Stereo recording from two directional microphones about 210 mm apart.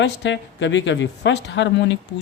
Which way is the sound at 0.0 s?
60° left (ahead or behind).